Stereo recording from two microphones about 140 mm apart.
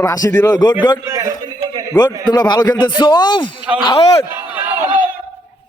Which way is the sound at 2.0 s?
30° left (ahead or behind).